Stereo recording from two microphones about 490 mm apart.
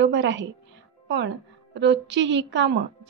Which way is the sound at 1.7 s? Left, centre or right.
Right.